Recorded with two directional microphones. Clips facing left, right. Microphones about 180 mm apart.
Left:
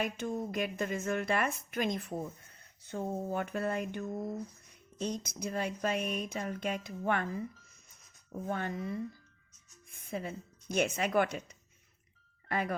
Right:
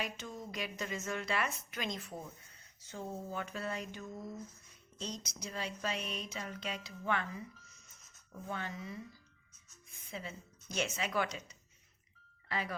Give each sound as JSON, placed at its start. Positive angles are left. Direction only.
{"t": 0.0, "sound": "speech", "side_deg": 55}
{"t": 10.1, "sound": "speech", "side_deg": 50}